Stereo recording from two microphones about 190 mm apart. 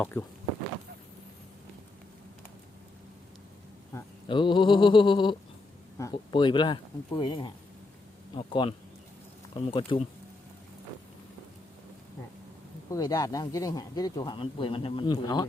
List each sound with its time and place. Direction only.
0.0 s speech: 10° left (ahead or behind)
4.3 s speech: 25° left (ahead or behind)
9.9 s speech: 25° left (ahead or behind)
12.9 s speech: 20° left (ahead or behind)